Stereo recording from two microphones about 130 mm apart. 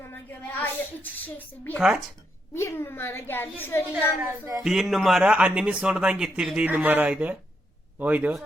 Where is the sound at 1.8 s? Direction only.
5° right (ahead or behind).